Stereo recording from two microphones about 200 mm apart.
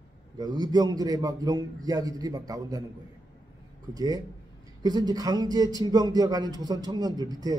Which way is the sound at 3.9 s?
20° right (ahead or behind).